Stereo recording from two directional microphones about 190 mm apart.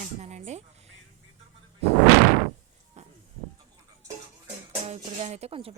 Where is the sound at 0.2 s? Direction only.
35° right (ahead or behind).